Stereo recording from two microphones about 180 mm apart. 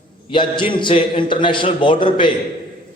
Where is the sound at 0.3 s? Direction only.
25° left (ahead or behind).